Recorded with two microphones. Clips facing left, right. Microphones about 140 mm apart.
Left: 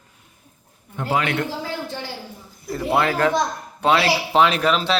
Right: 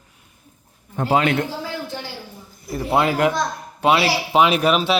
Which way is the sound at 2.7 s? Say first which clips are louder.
Right 1 dB; 15° right (ahead or behind).